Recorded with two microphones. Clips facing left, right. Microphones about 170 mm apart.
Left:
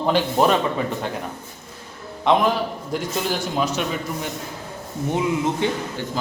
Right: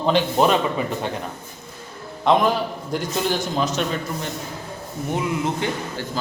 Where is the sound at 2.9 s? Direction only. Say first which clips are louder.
Right 2 dB; 5° left (ahead or behind).